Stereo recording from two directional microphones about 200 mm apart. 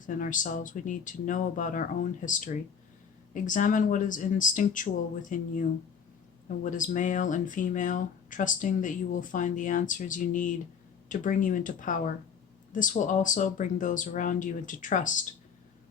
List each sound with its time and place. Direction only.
0.0 s speech: 40° left (ahead or behind)
6.7 s speech: 40° left (ahead or behind)